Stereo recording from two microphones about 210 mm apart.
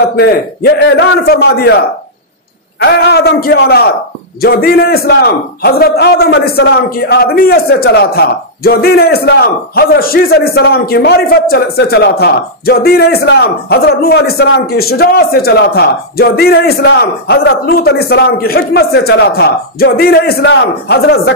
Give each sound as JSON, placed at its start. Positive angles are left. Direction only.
{"t": 0.1, "sound": "a man's voice", "side_deg": 50}
{"t": 2.8, "sound": "a man's voice", "side_deg": 50}